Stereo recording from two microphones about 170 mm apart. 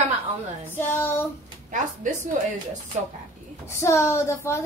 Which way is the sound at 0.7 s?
15° left (ahead or behind).